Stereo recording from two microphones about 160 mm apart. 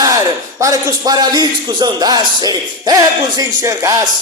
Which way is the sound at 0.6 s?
20° right (ahead or behind).